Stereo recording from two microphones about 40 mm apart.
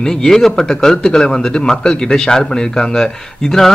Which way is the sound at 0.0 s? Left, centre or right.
Centre.